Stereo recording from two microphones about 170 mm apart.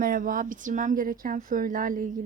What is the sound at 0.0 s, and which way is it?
Speech, 55° right (ahead or behind).